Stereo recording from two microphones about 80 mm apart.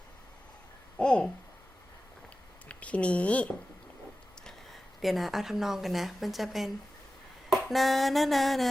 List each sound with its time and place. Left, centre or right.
0.9 s speech: centre
2.6 s speech: centre
4.4 s speech: centre
7.7 s a sound: centre